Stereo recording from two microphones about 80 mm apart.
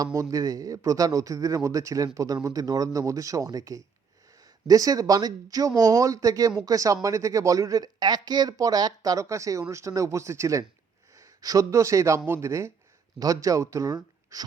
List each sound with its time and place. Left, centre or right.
0.0 s speech: right
13.1 s speech: right